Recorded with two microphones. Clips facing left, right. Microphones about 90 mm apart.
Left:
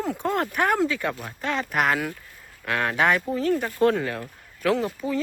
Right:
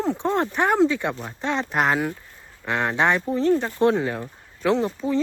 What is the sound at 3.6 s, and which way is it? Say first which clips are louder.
Speech: right 1 dB; 20° right (ahead or behind).